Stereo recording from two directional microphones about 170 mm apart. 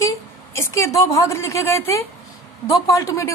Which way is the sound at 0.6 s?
15° left (ahead or behind).